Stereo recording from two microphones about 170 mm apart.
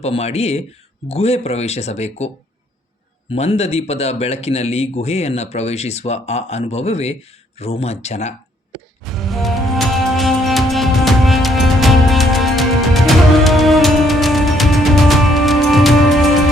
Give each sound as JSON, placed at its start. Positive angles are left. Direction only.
{"t": 0.0, "sound": "speech", "side_deg": 40}
{"t": 3.3, "sound": "speech", "side_deg": 40}
{"t": 9.0, "sound": "music", "side_deg": 0}